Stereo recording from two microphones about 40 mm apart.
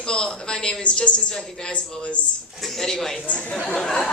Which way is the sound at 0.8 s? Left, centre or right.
Left.